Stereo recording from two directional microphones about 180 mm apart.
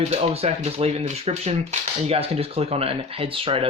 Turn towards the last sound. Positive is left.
turn(degrees=-30)  # may be behind; listen again after turning